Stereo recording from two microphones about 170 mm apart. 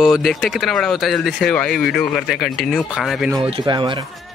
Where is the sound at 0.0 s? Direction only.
Centre (ahead or behind).